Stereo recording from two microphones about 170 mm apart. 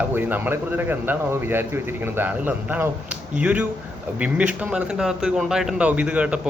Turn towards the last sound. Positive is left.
turn(degrees=-5)  # may be behind; listen again after turning